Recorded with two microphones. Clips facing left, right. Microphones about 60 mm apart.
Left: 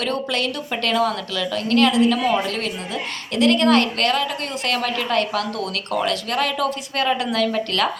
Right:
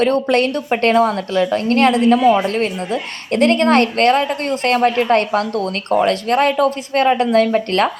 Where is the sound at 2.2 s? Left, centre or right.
Right.